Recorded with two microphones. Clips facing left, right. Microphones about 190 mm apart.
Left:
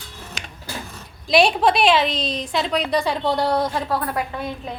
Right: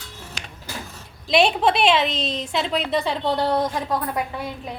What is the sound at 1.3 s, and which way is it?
A woman's voice, 25° right (ahead or behind).